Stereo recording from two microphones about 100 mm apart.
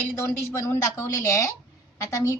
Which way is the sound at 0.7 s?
30° left (ahead or behind).